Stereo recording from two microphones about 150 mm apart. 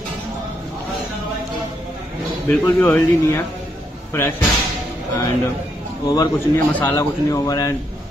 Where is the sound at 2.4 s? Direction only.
15° left (ahead or behind).